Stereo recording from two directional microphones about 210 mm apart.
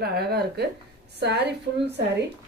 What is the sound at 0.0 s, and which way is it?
Speech, 50° right (ahead or behind).